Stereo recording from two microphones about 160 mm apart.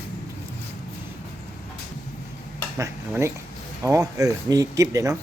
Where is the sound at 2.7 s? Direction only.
20° right (ahead or behind).